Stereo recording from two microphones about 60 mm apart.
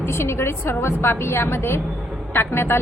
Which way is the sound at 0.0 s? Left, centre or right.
Left.